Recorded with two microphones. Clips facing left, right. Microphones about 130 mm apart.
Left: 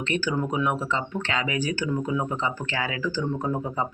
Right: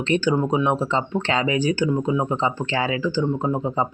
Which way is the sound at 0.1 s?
25° right (ahead or behind).